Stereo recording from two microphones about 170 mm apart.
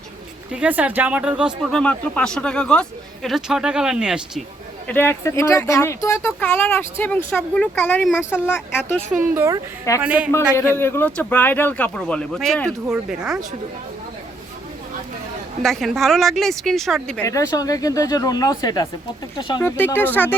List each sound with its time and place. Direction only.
0.5 s speech: 10° right (ahead or behind)
1.7 s speech: 5° left (ahead or behind)
4.9 s speech: 15° left (ahead or behind)
9.1 s speech: 15° right (ahead or behind)
10.8 s speech: 15° left (ahead or behind); by 13.4 s 5° right (ahead or behind)
15.6 s speech: centre (ahead or behind)
17.2 s speech: 20° left (ahead or behind)
19.6 s speech: 10° left (ahead or behind)